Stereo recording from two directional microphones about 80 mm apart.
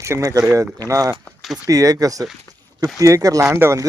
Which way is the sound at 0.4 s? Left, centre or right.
Right.